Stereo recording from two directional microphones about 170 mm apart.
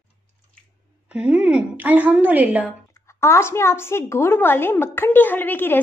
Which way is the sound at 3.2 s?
15° left (ahead or behind).